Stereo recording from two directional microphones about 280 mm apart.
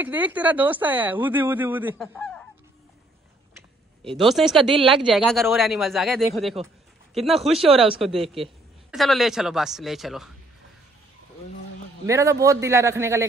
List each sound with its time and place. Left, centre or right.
0.0 s speech: centre
4.2 s speech: centre
7.5 s speech: right
7.8 s speech: centre
12.1 s a man's voice: centre